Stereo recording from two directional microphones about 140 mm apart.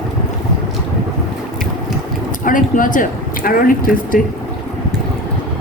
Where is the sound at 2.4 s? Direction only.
75° left (ahead or behind).